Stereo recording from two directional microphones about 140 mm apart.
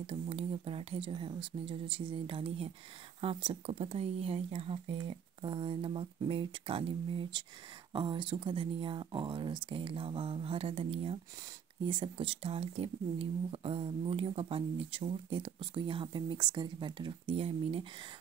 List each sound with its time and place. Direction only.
0.0 s speech: 45° right (ahead or behind)